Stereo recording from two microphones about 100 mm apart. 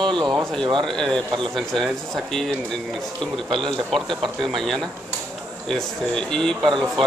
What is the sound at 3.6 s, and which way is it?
A man's voice, 5° left (ahead or behind).